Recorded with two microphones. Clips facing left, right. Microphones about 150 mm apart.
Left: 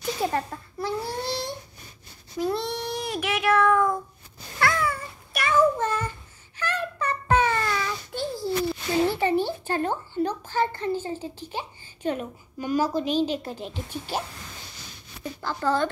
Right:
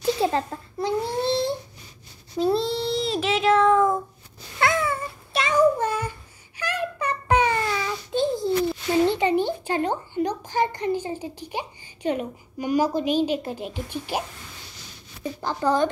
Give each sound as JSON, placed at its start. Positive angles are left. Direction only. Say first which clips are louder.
{"t": 0.0, "sound": "a sound", "louder": "right 4 dB", "side_deg": -25}
{"t": 2.3, "sound": "child singing", "louder": "right 5 dB", "side_deg": -30}
{"t": 4.6, "sound": "cat", "louder": "right 2 dB", "side_deg": -20}
{"t": 15.4, "sound": "speech", "louder": "right 3 dB", "side_deg": -15}